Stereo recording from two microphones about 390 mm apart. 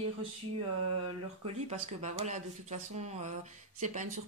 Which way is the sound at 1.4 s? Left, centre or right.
Centre.